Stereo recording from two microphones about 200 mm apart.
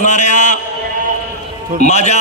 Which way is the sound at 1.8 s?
35° left (ahead or behind).